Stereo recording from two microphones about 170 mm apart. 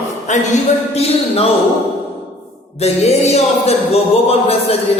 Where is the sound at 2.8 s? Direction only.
40° left (ahead or behind).